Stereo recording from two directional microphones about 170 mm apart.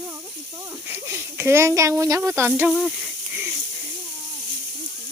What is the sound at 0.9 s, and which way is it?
Speech, 15° right (ahead or behind).